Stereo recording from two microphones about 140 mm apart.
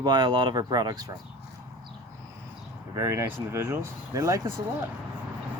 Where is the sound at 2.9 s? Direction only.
20° right (ahead or behind).